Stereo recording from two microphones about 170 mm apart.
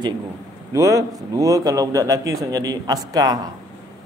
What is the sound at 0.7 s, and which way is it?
A man's voice, 20° right (ahead or behind).